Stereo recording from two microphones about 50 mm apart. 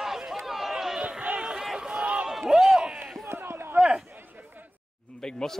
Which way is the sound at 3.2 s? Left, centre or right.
Right.